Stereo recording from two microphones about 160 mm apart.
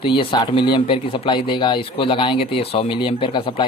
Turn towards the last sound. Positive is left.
turn(degrees=30)  # may be behind; listen again after turning